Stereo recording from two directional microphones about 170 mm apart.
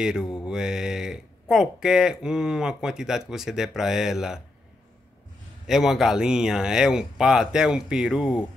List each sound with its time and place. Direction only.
0.0 s speech: 5° right (ahead or behind)
5.7 s speech: centre (ahead or behind)